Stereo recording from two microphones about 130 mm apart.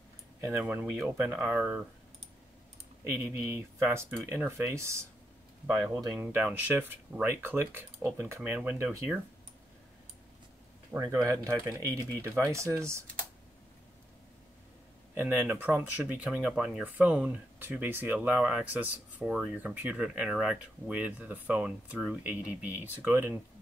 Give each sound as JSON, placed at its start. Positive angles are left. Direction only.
{"t": 0.4, "sound": "speech", "side_deg": -15}
{"t": 3.0, "sound": "speech", "side_deg": -20}
{"t": 10.9, "sound": "speech", "side_deg": -25}
{"t": 15.1, "sound": "speech", "side_deg": -15}